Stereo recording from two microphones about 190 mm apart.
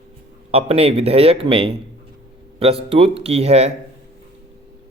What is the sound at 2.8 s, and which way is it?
Speech, 30° right (ahead or behind).